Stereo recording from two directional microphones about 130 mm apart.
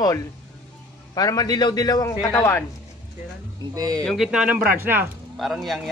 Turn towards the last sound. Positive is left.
turn(degrees=0)  # may be behind; listen again after turning